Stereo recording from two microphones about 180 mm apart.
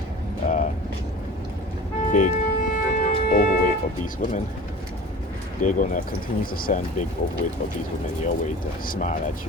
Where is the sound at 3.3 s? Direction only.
50° left (ahead or behind).